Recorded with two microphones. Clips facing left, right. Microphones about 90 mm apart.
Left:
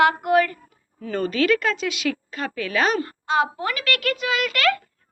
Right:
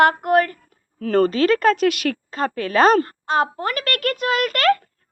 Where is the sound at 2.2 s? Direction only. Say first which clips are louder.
Right 5 dB; 35° right (ahead or behind).